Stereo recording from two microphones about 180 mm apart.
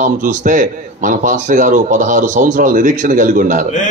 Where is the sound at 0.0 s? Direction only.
45° right (ahead or behind).